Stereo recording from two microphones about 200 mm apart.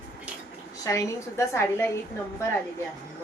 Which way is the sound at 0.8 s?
15° left (ahead or behind).